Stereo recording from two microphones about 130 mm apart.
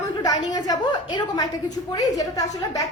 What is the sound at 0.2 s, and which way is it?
A woman's voice, 30° left (ahead or behind).